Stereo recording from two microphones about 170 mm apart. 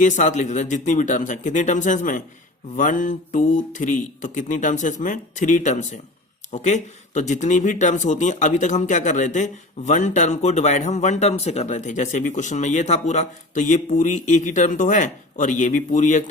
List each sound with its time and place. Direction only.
0.0 s speech: 45° left (ahead or behind)